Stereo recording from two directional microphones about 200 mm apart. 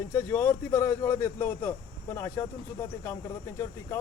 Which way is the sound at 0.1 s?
15° left (ahead or behind).